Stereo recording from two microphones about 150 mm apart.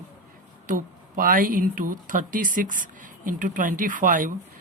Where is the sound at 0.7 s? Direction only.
65° right (ahead or behind).